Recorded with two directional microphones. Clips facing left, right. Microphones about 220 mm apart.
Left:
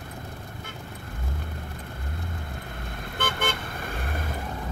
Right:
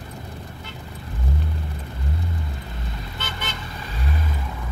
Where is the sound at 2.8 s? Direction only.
55° left (ahead or behind).